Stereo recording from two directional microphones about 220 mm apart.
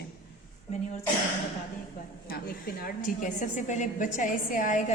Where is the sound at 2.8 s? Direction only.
35° left (ahead or behind).